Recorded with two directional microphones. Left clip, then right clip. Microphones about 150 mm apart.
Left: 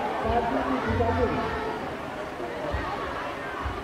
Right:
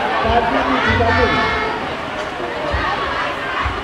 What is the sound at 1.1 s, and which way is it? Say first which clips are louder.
Speech: right 11 dB; 20° right (ahead or behind).